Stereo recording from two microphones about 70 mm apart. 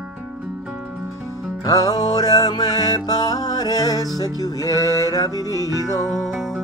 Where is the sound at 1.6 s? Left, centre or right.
Left.